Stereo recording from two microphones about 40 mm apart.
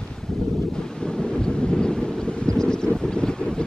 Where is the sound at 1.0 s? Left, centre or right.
Centre.